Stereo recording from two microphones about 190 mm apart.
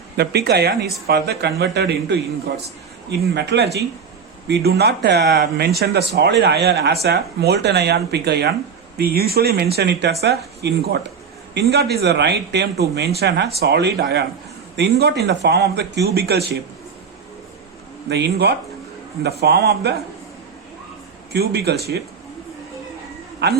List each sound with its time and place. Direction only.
0.2 s speech: 60° right (ahead or behind)
18.1 s speech: 60° right (ahead or behind)
21.3 s speech: 60° right (ahead or behind)
23.4 s speech: 60° right (ahead or behind)